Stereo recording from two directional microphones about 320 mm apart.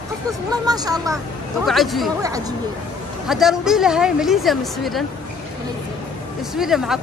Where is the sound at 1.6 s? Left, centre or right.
Centre.